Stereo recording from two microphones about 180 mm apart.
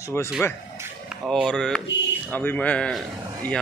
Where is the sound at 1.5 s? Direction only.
5° left (ahead or behind).